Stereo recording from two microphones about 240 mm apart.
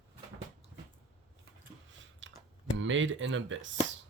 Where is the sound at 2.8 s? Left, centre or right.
Right.